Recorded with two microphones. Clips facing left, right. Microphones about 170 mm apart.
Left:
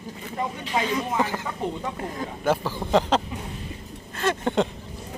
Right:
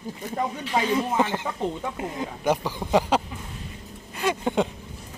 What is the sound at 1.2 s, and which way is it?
Speech, 20° right (ahead or behind).